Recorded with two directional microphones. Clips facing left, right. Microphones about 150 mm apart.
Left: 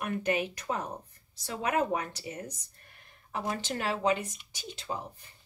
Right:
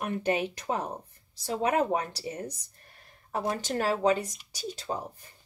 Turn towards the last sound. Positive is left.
turn(degrees=-40)  # may be behind; listen again after turning